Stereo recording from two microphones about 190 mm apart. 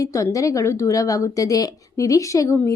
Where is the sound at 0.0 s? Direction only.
15° left (ahead or behind).